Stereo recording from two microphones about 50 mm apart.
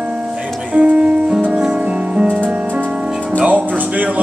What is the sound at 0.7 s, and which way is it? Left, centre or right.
Music, right.